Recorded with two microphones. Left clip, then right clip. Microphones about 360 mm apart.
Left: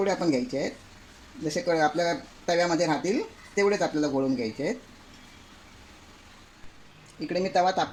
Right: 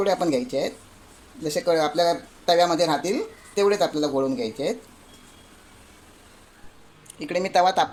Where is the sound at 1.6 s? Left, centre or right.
Right.